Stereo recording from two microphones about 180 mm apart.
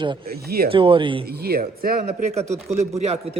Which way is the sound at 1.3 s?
60° right (ahead or behind).